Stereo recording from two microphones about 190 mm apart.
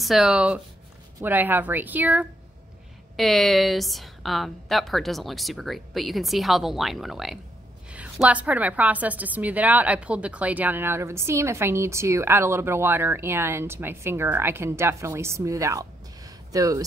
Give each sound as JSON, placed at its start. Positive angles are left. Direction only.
{"t": 0.0, "sound": "a woman's voice", "side_deg": -5}